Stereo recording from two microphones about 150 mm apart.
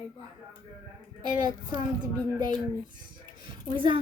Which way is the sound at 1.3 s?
30° right (ahead or behind).